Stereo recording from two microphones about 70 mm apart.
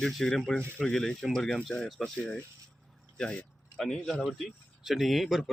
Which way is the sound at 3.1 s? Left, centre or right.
Centre.